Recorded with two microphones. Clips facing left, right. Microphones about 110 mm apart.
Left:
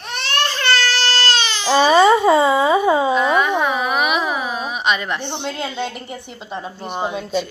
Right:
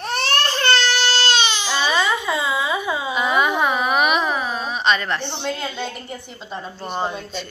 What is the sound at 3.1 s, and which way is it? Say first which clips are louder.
Speech: left 3 dB; 5° right (ahead or behind).